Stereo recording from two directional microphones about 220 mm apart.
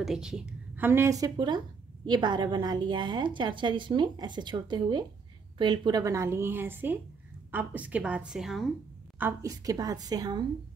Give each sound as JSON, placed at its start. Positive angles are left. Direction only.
{"t": 0.0, "sound": "a woman's voice", "side_deg": 0}
{"t": 9.2, "sound": "a woman's voice", "side_deg": -15}